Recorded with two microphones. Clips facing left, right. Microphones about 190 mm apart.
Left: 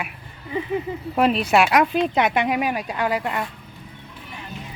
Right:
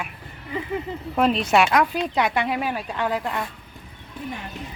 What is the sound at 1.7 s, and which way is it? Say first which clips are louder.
Speech: left 2 dB; 20° left (ahead or behind).